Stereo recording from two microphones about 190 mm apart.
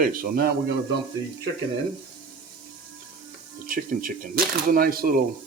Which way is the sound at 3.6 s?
50° right (ahead or behind).